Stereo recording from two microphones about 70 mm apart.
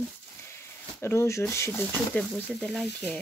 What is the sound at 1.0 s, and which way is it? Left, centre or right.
Speech, left.